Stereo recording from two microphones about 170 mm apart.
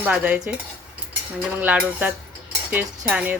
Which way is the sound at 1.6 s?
10° right (ahead or behind).